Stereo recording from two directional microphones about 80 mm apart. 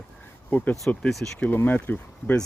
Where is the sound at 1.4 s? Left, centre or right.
Left.